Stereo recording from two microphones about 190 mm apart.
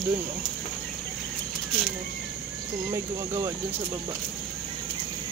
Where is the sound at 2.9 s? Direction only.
15° right (ahead or behind).